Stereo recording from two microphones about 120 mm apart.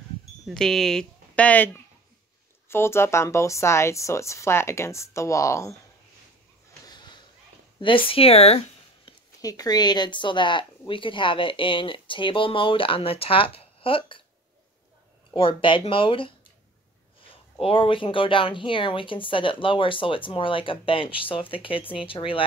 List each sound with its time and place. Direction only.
0.5 s speech: 5° left (ahead or behind); by 5.8 s 25° left (ahead or behind)
7.8 s speech: 45° left (ahead or behind)
9.4 s speech: 30° left (ahead or behind); by 14.2 s 45° left (ahead or behind)
15.3 s speech: 45° left (ahead or behind)
17.6 s speech: 50° left (ahead or behind)